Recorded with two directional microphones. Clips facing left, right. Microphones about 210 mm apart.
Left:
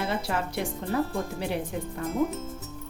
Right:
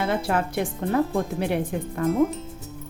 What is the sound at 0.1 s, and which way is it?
Speech, 55° right (ahead or behind).